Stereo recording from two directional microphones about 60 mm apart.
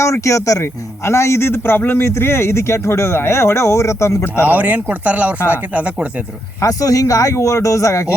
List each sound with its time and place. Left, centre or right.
0.0 s speech: left
0.6 s a man's voice: left
4.4 s speech: right
6.6 s speech: left